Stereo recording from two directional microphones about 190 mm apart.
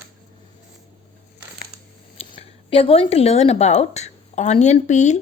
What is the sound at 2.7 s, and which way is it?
A woman's voice, 30° left (ahead or behind).